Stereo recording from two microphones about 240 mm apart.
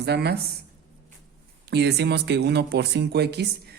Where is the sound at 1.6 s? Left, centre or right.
Right.